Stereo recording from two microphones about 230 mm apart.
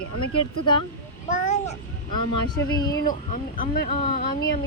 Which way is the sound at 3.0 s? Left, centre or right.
Left.